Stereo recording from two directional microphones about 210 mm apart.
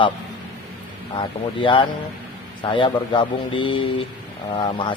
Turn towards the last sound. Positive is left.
turn(degrees=20)  # may be behind; listen again after turning